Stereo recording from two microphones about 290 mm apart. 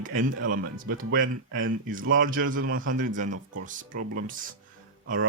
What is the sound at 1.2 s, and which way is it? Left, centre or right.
Speech, right.